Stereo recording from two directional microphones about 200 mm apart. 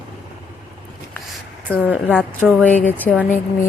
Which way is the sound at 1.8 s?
10° right (ahead or behind).